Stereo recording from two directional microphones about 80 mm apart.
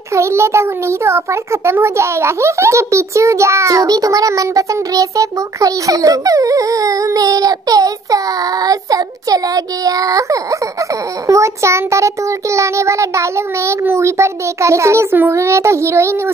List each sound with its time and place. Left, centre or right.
0.1 s a child's voice: right